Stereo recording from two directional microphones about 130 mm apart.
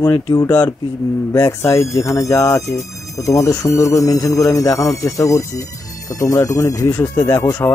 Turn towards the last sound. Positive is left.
turn(degrees=20)  # may be behind; listen again after turning